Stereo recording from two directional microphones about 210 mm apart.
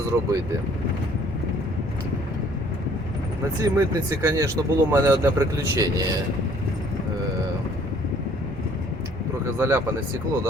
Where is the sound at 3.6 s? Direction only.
15° right (ahead or behind).